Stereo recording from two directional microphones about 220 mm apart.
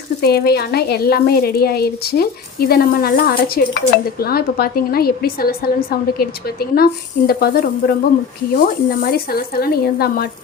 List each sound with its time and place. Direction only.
0.2 s speech: 45° left (ahead or behind)